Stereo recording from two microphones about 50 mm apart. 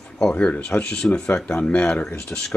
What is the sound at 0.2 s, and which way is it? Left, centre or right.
Speech, centre.